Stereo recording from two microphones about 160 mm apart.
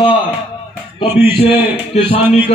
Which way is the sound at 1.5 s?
10° right (ahead or behind).